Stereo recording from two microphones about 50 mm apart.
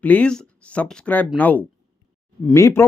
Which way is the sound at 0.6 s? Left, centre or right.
Left.